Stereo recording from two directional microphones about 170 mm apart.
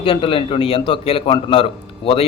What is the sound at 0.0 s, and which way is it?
A man's voice, 30° left (ahead or behind).